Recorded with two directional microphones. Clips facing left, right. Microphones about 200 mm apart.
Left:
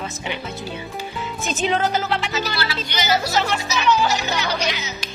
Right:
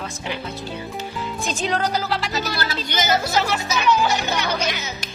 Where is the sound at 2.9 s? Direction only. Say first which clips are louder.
Right 1 dB; 50° right (ahead or behind).